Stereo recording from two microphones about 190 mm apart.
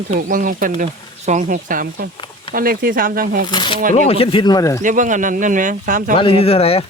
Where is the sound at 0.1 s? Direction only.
45° right (ahead or behind).